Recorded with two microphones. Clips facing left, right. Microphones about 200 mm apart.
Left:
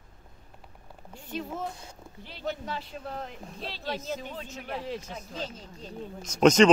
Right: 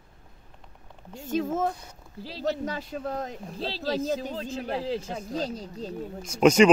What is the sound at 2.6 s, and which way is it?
Speech, 45° right (ahead or behind).